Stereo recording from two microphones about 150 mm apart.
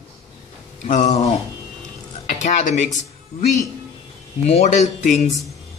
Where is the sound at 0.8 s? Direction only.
55° left (ahead or behind).